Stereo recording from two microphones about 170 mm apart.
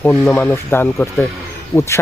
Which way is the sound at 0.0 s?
10° left (ahead or behind).